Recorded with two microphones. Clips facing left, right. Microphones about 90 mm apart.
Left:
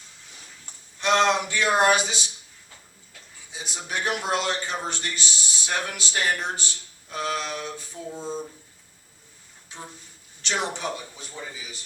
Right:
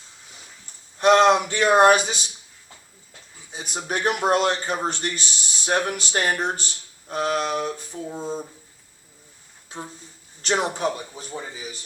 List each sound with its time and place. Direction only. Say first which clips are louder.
0.9 s a sound: right 6 dB; 40° right (ahead or behind)
1.3 s speech: right 5 dB; 40° right (ahead or behind)
3.5 s a man's voice: right 4 dB; 45° right (ahead or behind)
8.2 s speech: right 1 dB; 10° right (ahead or behind)
10.4 s speech: right 5 dB; 40° right (ahead or behind)